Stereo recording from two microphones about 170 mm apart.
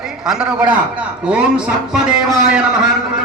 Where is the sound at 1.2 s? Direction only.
5° right (ahead or behind).